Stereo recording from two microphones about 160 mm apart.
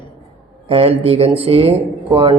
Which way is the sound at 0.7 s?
35° right (ahead or behind).